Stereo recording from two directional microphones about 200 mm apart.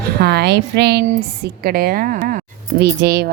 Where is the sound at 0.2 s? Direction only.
55° right (ahead or behind).